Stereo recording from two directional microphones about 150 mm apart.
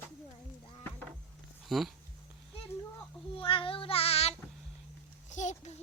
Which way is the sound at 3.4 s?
35° left (ahead or behind).